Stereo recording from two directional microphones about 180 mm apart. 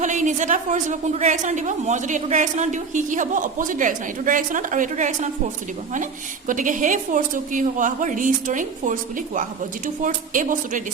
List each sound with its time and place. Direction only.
0.0 s a woman's voice: 45° right (ahead or behind)
6.5 s a woman's voice: 45° right (ahead or behind)